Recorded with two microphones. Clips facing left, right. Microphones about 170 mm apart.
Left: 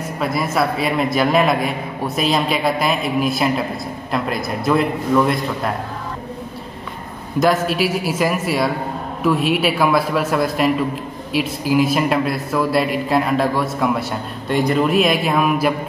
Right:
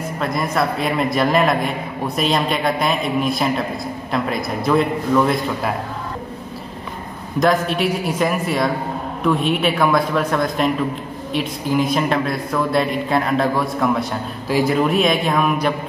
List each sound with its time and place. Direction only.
0.2 s a man's voice: 5° left (ahead or behind)
7.3 s a man's voice: 5° left (ahead or behind)